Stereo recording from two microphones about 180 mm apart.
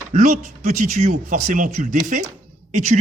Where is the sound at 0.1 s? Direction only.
45° right (ahead or behind).